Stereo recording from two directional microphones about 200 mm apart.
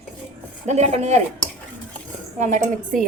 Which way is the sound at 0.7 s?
35° right (ahead or behind).